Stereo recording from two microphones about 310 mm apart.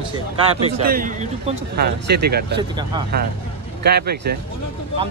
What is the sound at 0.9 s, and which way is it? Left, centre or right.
Speech, right.